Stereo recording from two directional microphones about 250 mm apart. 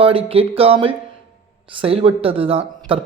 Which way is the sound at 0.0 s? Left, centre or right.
Right.